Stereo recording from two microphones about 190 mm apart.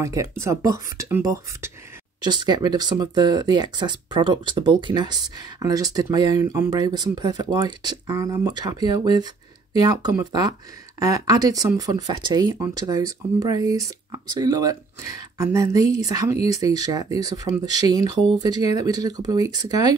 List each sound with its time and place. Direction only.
0.0 s speech: 15° right (ahead or behind)